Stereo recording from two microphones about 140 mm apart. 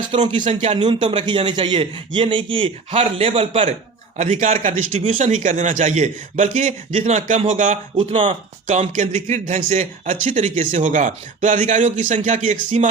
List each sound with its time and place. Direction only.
0.3 s a man's voice: 35° right (ahead or behind)
4.2 s a man's voice: 60° right (ahead or behind)
7.9 s a man's voice: 40° right (ahead or behind)
8.3 s a man's voice: 55° right (ahead or behind)